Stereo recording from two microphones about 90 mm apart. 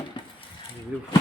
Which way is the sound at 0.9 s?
15° right (ahead or behind).